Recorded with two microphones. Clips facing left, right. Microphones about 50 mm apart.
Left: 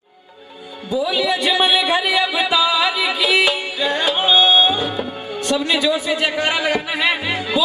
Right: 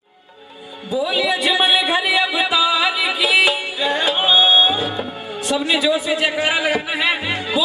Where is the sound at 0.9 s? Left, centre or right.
Centre.